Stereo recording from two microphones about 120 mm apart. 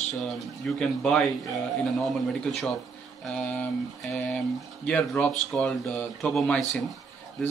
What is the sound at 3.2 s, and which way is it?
A man's voice, 10° left (ahead or behind).